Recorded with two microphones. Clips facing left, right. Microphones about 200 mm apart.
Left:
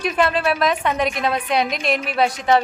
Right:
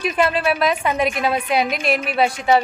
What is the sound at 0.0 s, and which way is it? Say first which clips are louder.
A woman's voice: even; 5° right (ahead or behind).